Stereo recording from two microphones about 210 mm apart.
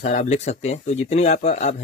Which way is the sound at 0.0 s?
35° left (ahead or behind).